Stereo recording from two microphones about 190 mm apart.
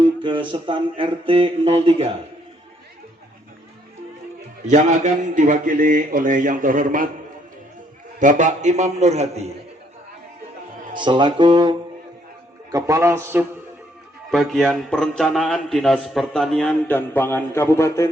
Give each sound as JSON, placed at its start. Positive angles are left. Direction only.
{"t": 0.0, "sound": "a sound", "side_deg": -25}
{"t": 4.6, "sound": "a man's voice", "side_deg": -40}
{"t": 8.2, "sound": "a man's voice", "side_deg": -40}
{"t": 10.9, "sound": "a sound", "side_deg": -25}
{"t": 12.7, "sound": "a man's voice", "side_deg": -15}
{"t": 14.3, "sound": "a man's voice", "side_deg": 0}